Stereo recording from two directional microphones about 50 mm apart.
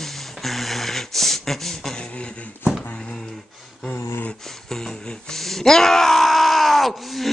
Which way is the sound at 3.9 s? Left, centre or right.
Left.